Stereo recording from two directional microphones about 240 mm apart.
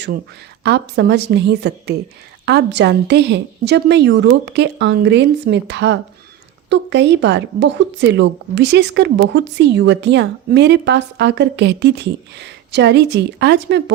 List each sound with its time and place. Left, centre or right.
0.6 s a woman's voice: right